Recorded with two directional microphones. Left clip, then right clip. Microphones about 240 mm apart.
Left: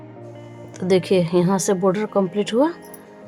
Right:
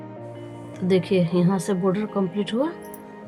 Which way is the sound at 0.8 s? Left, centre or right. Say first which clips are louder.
Left 4 dB; left.